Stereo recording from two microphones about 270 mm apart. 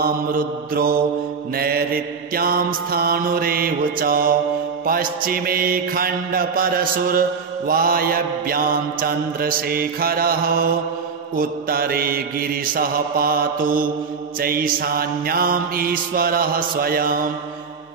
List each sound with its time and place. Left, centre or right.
0.0 s mantra: right